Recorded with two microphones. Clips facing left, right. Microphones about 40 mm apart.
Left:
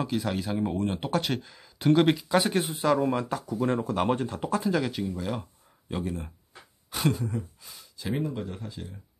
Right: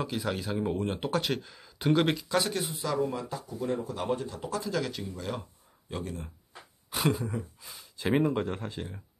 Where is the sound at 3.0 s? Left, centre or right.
Left.